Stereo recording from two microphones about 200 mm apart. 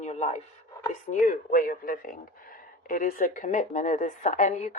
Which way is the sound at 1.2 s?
40° left (ahead or behind).